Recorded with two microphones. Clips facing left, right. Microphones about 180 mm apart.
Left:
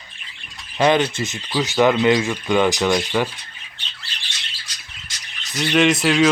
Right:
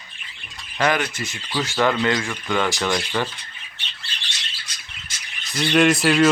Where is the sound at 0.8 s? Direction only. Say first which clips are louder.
Left 5 dB; 25° left (ahead or behind).